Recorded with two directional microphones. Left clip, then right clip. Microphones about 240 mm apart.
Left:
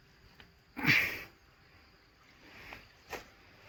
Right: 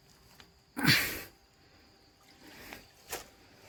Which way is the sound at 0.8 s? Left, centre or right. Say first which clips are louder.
Even; right.